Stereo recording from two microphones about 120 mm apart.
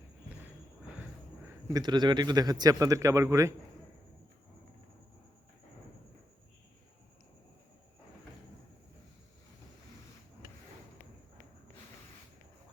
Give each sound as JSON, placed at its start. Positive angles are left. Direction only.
{"t": 1.7, "sound": "a man's voice", "side_deg": -35}